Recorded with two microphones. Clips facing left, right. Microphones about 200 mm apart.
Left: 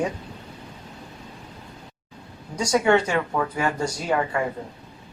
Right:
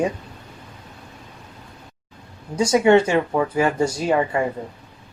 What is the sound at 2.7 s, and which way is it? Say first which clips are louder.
Speech: right 4 dB; 25° right (ahead or behind).